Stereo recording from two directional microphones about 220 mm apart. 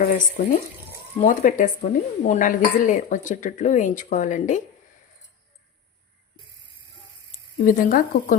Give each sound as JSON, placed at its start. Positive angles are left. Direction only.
{"t": 0.0, "sound": "speech", "side_deg": 35}
{"t": 7.6, "sound": "speech", "side_deg": 40}